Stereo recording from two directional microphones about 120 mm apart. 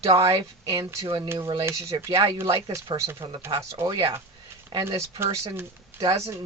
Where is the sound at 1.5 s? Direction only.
25° right (ahead or behind).